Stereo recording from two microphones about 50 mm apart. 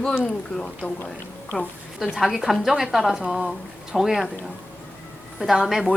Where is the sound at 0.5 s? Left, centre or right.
Left.